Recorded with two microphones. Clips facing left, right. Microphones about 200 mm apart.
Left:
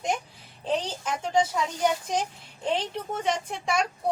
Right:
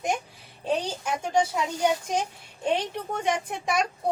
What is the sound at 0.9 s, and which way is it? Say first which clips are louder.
Speech: right 1 dB; 10° right (ahead or behind).